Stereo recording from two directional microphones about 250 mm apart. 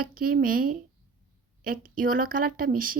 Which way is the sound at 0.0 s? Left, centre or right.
Right.